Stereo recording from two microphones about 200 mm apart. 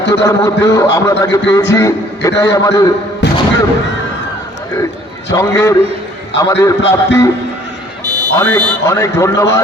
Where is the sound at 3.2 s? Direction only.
60° left (ahead or behind).